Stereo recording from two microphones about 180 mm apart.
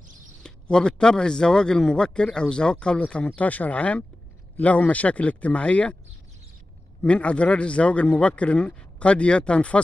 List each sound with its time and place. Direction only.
0.4 s a man's voice: 5° left (ahead or behind)
7.0 s a man's voice: 5° left (ahead or behind)